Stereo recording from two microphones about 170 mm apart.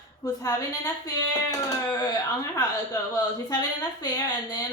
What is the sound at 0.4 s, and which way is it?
Speech, 20° left (ahead or behind).